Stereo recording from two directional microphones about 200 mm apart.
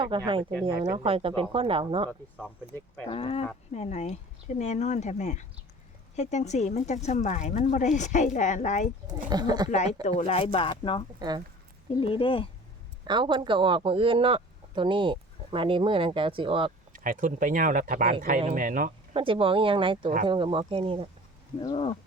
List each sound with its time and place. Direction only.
0.1 s speech: 25° right (ahead or behind)
3.1 s speech: 30° left (ahead or behind)
9.3 s speech: 20° right (ahead or behind)
9.6 s speech: 35° left (ahead or behind)
11.2 s speech: 20° right (ahead or behind)
11.9 s speech: 25° left (ahead or behind)
13.1 s speech: 25° right (ahead or behind)
16.9 s speech: 40° right (ahead or behind)
19.1 s speech: 25° right (ahead or behind)
21.6 s speech: 20° left (ahead or behind)